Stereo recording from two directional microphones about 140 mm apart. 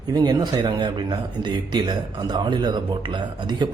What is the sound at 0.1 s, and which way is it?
A man's voice, 30° right (ahead or behind).